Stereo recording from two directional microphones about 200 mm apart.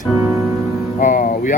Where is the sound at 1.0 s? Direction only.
40° left (ahead or behind).